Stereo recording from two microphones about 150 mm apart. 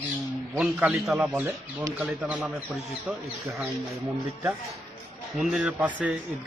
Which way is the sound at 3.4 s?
20° right (ahead or behind).